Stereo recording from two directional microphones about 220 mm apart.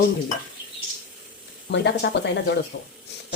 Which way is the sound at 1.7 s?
50° left (ahead or behind).